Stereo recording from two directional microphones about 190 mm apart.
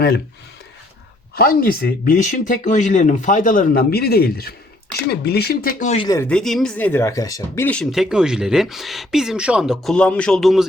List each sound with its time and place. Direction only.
1.4 s speech: 50° left (ahead or behind)
5.8 s speech: 35° left (ahead or behind)
6.1 s speech: 15° left (ahead or behind)
6.3 s speech: 5° left (ahead or behind)